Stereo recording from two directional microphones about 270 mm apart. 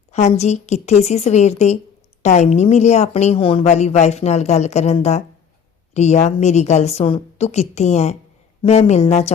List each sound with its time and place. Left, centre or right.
0.1 s a woman's voice: left